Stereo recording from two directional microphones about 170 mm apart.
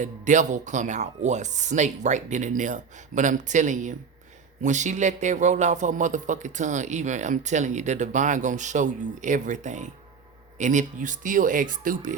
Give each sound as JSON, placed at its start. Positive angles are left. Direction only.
{"t": 0.0, "sound": "a man's voice", "side_deg": -45}